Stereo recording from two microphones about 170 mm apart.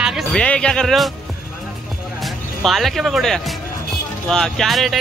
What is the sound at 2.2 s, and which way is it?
Speech, centre (ahead or behind).